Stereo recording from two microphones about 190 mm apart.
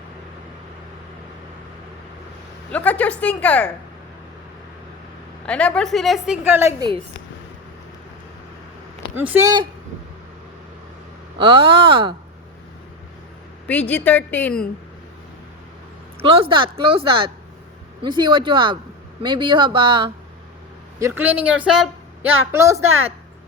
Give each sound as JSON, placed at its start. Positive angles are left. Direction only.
{"t": 2.7, "sound": "a woman's voice", "side_deg": 5}
{"t": 5.5, "sound": "a woman's voice", "side_deg": 5}
{"t": 9.1, "sound": "speech", "side_deg": -10}
{"t": 11.3, "sound": "a woman's voice", "side_deg": -30}
{"t": 13.7, "sound": "a woman's voice", "side_deg": 5}
{"t": 16.2, "sound": "a woman's voice", "side_deg": -30}
{"t": 21.0, "sound": "speech", "side_deg": -10}